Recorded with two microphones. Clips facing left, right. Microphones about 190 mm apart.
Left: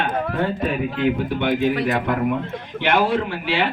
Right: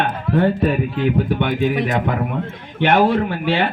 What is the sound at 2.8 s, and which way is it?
Speech, 55° right (ahead or behind).